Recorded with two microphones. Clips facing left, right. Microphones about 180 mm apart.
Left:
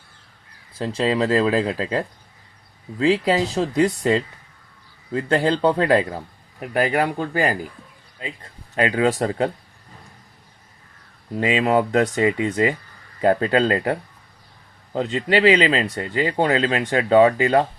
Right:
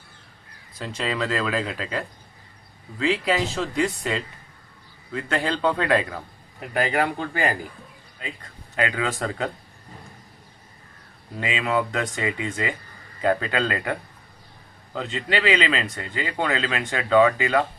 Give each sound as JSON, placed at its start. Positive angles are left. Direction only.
{"t": 0.8, "sound": "speech", "side_deg": 30}
{"t": 11.3, "sound": "speech", "side_deg": 40}